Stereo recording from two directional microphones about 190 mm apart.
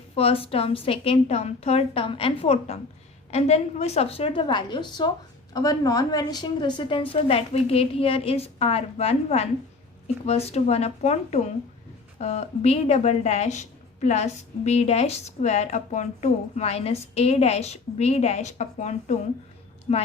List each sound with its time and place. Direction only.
0.2 s a woman's voice: 30° left (ahead or behind)